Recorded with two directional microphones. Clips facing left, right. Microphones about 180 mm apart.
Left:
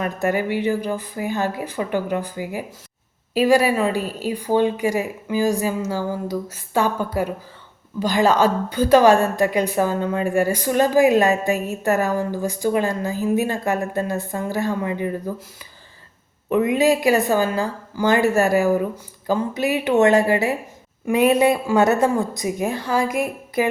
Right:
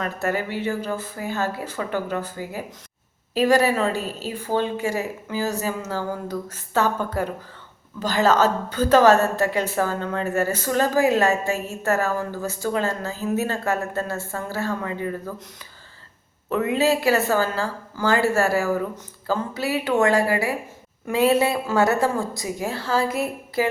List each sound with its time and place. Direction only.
0.0 s a woman's voice: 15° left (ahead or behind)
16.5 s a woman's voice: 15° left (ahead or behind)